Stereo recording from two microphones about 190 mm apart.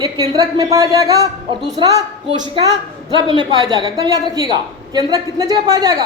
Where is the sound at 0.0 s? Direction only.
20° right (ahead or behind).